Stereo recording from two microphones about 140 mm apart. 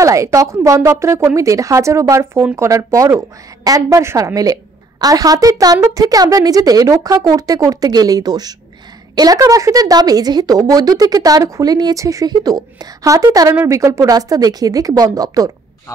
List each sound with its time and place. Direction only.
0.0 s a woman's voice: 20° right (ahead or behind)